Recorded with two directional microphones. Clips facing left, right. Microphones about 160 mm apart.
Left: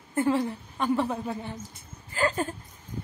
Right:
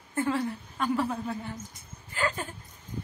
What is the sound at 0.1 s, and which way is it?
A woman's voice, 30° left (ahead or behind).